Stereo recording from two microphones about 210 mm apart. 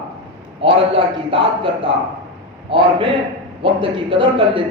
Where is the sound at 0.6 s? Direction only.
25° right (ahead or behind).